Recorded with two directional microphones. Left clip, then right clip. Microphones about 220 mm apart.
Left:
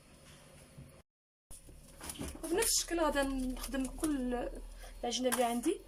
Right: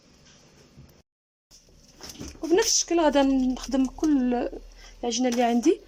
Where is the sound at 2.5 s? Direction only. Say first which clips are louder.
Right 12 dB; 45° right (ahead or behind).